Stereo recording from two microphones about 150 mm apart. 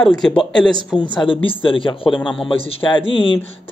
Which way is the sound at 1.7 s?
35° left (ahead or behind).